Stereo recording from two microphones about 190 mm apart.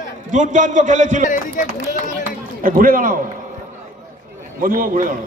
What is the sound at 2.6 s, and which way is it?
Speech, 45° right (ahead or behind).